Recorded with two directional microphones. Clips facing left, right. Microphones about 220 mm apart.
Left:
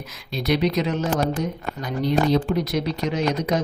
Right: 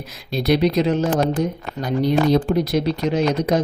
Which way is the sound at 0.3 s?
35° right (ahead or behind).